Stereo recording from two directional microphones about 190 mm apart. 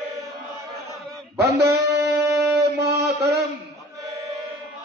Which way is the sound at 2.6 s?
60° right (ahead or behind).